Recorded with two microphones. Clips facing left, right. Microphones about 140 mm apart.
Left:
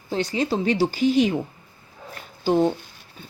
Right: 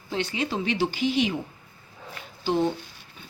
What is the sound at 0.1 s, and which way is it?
A woman's voice, 40° left (ahead or behind).